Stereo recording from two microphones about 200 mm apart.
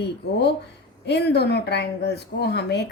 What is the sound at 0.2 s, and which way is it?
Speech, 55° left (ahead or behind).